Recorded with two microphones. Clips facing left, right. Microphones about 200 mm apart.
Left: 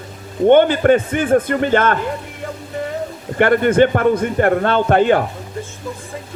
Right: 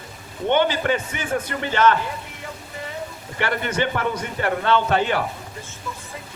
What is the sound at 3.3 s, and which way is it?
A man's voice, 50° left (ahead or behind).